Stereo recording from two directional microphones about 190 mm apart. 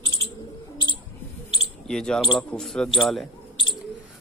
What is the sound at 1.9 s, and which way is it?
Speech, 5° left (ahead or behind).